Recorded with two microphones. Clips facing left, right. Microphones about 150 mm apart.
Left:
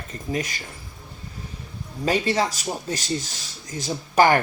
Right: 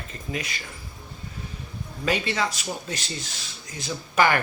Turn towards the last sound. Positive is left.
turn(degrees=40)  # may be behind; listen again after turning